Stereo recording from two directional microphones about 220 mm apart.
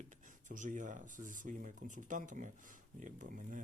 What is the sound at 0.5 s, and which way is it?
Speech, 35° right (ahead or behind).